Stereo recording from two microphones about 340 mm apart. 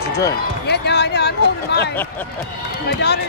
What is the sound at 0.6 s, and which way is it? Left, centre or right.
Speech, left.